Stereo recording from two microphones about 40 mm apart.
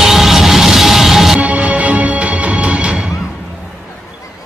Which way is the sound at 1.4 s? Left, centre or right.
Right.